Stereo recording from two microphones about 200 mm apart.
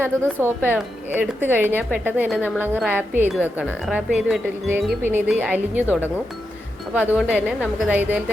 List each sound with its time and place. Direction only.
0.0 s speech: 10° right (ahead or behind)